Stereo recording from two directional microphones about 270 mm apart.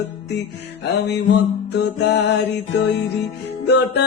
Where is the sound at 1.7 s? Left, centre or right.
Left.